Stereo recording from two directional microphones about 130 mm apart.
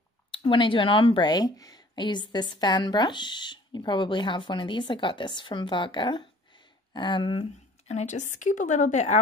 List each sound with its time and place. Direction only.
0.3 s a woman's voice: 40° left (ahead or behind)
7.9 s speech: 65° left (ahead or behind)